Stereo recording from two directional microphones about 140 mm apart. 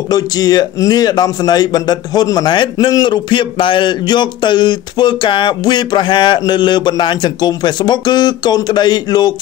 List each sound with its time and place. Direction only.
0.1 s speech: 30° left (ahead or behind)